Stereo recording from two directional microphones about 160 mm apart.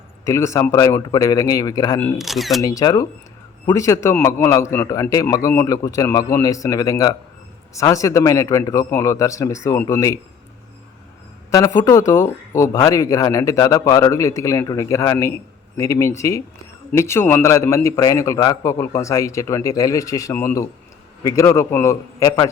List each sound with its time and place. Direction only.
0.3 s speech: 15° left (ahead or behind)
2.1 s speech: centre (ahead or behind)
2.6 s speech: 20° left (ahead or behind)
11.5 s speech: 20° left (ahead or behind)